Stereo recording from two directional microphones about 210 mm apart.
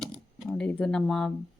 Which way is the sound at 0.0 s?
Centre (ahead or behind).